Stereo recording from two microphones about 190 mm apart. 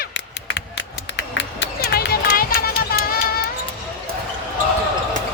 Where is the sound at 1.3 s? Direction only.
65° left (ahead or behind).